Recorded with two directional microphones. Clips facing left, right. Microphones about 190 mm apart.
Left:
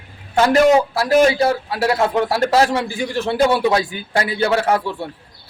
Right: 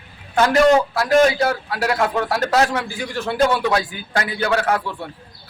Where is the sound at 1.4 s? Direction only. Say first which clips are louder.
Left 3 dB; 30° left (ahead or behind).